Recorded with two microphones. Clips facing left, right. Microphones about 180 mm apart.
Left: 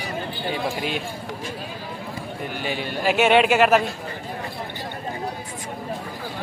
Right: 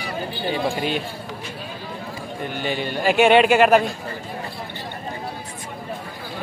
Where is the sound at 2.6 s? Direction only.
5° left (ahead or behind).